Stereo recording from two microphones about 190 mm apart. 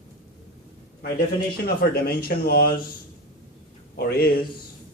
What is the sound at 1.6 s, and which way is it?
Speech, 50° left (ahead or behind).